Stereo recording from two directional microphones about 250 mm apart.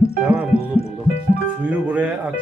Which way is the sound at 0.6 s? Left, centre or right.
Left.